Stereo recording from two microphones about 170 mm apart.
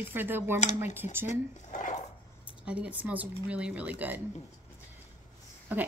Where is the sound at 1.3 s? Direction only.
50° left (ahead or behind).